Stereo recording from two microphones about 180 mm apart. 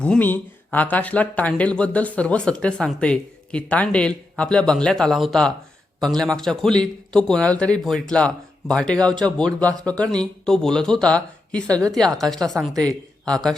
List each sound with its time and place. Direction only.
0.0 s speech: 10° left (ahead or behind)
9.0 s speech: 20° right (ahead or behind)
9.2 s a man's voice: 5° left (ahead or behind)